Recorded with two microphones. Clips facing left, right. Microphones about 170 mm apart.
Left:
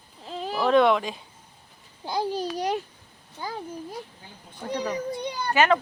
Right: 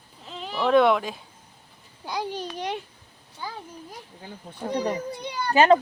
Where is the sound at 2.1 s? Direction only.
30° left (ahead or behind).